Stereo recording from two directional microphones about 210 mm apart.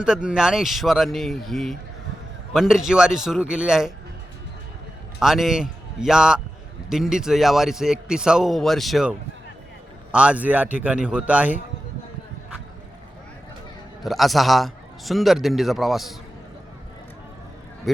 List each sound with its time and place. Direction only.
0.0 s a man's voice: 5° right (ahead or behind)
5.2 s a man's voice: centre (ahead or behind)
14.0 s a man's voice: centre (ahead or behind)
17.9 s a man's voice: centre (ahead or behind)